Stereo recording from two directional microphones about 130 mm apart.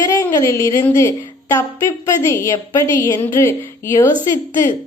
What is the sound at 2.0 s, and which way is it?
A woman's voice, 20° left (ahead or behind).